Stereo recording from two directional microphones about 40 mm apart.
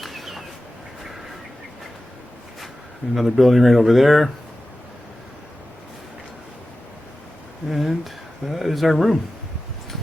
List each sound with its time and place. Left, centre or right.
0.0 s bird: centre
3.2 s speech: centre
7.7 s speech: centre